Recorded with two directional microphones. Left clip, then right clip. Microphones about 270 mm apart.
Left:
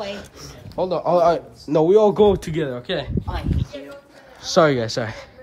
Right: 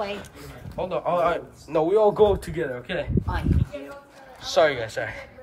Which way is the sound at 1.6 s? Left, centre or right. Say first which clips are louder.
Left 5 dB; left.